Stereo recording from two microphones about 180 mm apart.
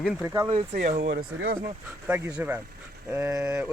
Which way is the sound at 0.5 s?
45° right (ahead or behind).